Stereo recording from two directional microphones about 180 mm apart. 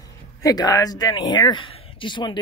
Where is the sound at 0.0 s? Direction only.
20° left (ahead or behind).